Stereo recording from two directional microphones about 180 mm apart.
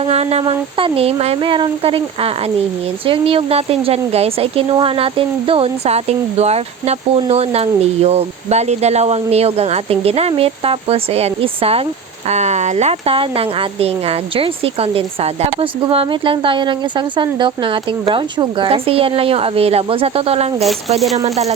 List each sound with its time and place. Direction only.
0.0 s a woman's voice: 35° right (ahead or behind)